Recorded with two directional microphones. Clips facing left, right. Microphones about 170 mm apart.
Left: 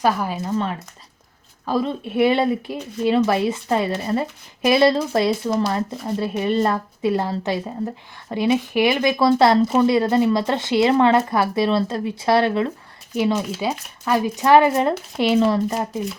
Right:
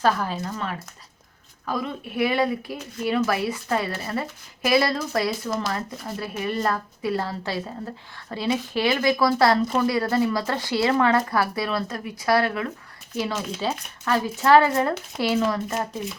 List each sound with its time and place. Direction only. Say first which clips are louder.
0.0 s speech: left 2 dB; 15° left (ahead or behind)